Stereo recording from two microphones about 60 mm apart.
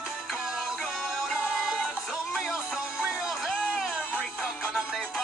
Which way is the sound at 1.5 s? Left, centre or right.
Centre.